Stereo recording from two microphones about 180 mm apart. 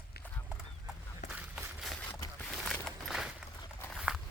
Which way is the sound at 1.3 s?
5° right (ahead or behind).